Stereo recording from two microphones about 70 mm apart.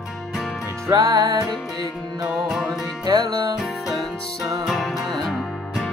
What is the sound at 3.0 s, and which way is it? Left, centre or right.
Music, right.